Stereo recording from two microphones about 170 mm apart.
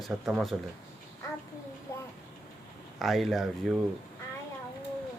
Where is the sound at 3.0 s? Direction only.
Centre (ahead or behind).